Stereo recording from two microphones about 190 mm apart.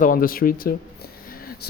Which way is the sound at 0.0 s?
50° left (ahead or behind).